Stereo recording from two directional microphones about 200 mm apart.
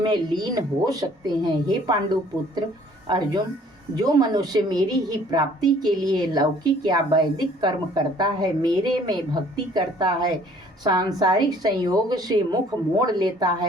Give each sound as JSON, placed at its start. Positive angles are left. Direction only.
{"t": 0.0, "sound": "a woman's voice", "side_deg": -20}
{"t": 3.1, "sound": "a woman's voice", "side_deg": -20}